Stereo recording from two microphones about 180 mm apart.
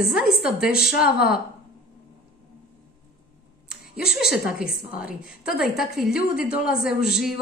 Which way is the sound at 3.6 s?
5° right (ahead or behind).